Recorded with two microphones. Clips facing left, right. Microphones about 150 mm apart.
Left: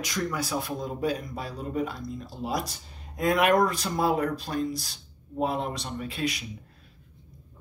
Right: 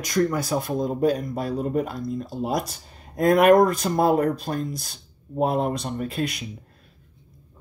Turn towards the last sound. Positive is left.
turn(degrees=-50)  # may be behind; listen again after turning